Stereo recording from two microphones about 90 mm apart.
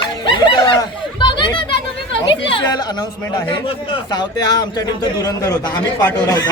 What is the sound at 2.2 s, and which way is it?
Speech, 50° left (ahead or behind).